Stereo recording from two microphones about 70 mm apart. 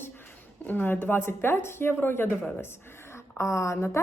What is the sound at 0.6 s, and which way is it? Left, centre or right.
A woman's voice, left.